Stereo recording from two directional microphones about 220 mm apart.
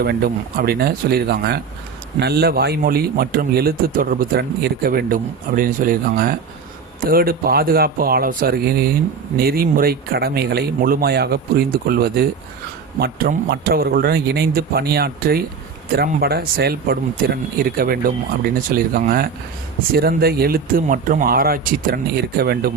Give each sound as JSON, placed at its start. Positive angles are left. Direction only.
{"t": 0.0, "sound": "a man's voice", "side_deg": -45}